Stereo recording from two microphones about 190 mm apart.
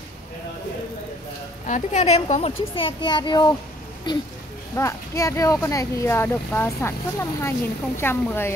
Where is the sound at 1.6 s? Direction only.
40° left (ahead or behind).